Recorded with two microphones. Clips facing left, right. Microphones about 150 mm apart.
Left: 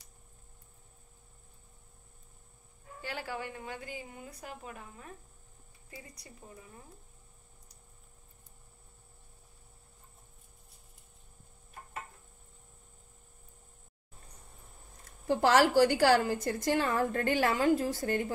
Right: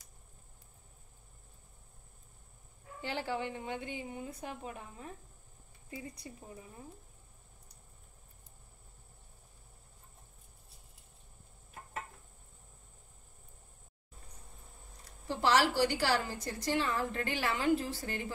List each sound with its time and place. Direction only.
3.0 s a woman's voice: 20° right (ahead or behind)
15.0 s a woman's voice: 50° left (ahead or behind)